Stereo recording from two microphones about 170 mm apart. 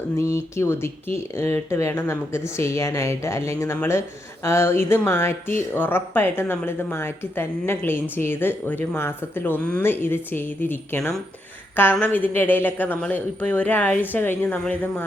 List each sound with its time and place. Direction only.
0.2 s speech: 15° left (ahead or behind)